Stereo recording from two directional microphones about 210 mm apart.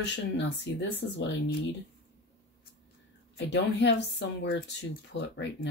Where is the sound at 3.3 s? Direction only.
55° left (ahead or behind).